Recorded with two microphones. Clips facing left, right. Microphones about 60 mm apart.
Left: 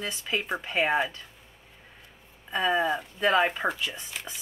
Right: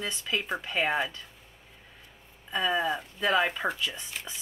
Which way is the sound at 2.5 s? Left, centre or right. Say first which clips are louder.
Left 2 dB; centre.